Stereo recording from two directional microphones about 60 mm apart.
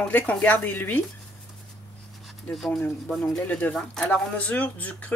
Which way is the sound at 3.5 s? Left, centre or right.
Left.